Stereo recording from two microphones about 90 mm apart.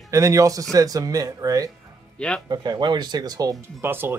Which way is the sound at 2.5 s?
55° right (ahead or behind).